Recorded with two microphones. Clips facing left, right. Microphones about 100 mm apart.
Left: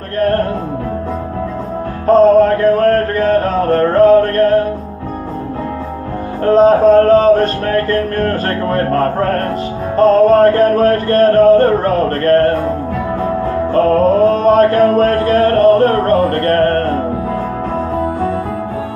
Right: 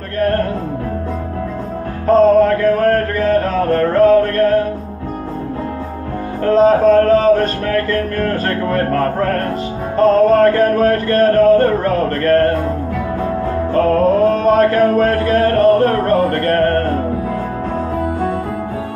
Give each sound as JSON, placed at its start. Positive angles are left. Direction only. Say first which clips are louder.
{"t": 0.2, "sound": "music", "louder": "left 2 dB", "side_deg": 40}
{"t": 2.0, "sound": "a sound", "louder": "left 2 dB", "side_deg": 40}
{"t": 6.4, "sound": "music", "louder": "left 2 dB", "side_deg": 35}
{"t": 13.7, "sound": "music", "louder": "left 2 dB", "side_deg": 35}